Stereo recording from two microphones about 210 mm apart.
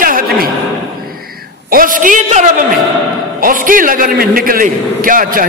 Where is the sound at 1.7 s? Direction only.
40° right (ahead or behind).